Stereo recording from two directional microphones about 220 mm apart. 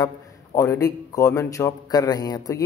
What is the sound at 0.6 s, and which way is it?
A man's voice, 15° left (ahead or behind).